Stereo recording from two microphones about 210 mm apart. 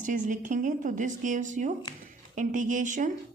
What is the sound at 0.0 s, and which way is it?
A woman's voice, 35° right (ahead or behind).